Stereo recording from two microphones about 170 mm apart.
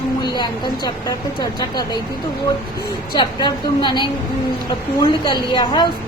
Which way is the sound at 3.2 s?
25° left (ahead or behind).